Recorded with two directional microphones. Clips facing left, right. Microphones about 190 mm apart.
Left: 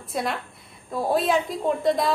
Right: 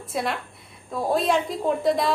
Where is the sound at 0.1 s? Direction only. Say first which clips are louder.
Even; centre (ahead or behind).